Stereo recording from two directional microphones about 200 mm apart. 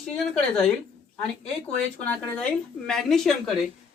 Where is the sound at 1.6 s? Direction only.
5° left (ahead or behind).